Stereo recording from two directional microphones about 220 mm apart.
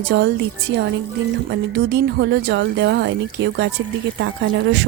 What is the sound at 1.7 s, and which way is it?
A woman's voice, 50° right (ahead or behind).